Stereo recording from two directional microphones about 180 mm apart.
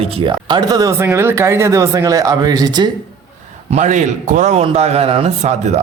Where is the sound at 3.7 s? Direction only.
40° right (ahead or behind).